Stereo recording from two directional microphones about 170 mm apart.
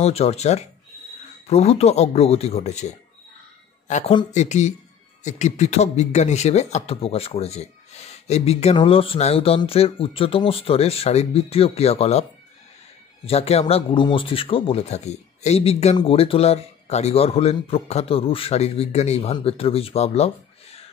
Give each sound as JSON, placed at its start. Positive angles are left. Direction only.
{"t": 0.0, "sound": "speech", "side_deg": 40}